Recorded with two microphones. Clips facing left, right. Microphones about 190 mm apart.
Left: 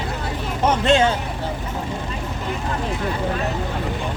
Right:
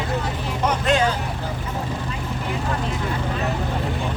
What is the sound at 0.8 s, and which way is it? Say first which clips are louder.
Speech: left 3 dB; 25° left (ahead or behind).